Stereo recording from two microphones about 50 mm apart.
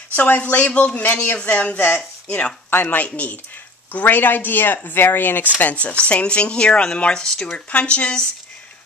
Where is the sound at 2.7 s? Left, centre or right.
Left.